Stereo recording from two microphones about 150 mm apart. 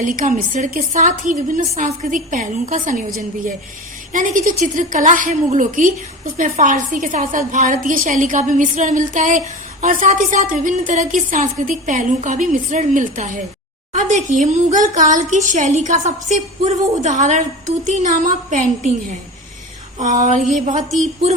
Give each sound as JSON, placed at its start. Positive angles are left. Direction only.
{"t": 0.0, "sound": "a woman's voice", "side_deg": -65}
{"t": 4.1, "sound": "a woman's voice", "side_deg": -60}
{"t": 20.0, "sound": "a woman's voice", "side_deg": -55}